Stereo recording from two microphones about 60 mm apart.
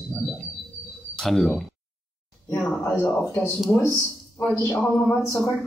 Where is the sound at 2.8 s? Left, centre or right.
Left.